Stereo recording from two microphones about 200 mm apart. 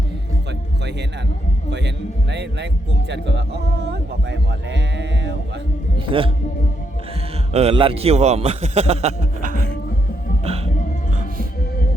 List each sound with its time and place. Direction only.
2.3 s speech: 60° right (ahead or behind)
6.1 s speech: 25° right (ahead or behind)
7.5 s a man's voice: 30° right (ahead or behind)